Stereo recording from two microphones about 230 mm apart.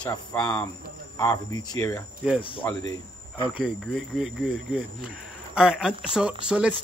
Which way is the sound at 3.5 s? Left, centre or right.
Centre.